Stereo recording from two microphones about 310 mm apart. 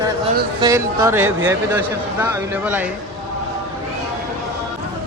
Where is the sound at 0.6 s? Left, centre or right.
Centre.